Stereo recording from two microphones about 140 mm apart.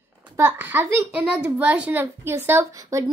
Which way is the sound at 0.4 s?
15° right (ahead or behind).